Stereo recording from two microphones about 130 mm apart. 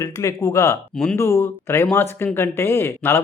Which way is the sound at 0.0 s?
25° left (ahead or behind).